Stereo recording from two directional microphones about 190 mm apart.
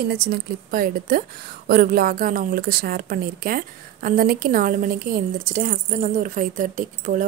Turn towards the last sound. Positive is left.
turn(degrees=-45)  # may be behind; listen again after turning